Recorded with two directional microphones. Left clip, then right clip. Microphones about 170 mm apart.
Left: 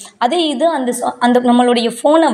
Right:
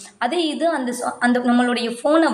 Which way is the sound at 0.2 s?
25° left (ahead or behind).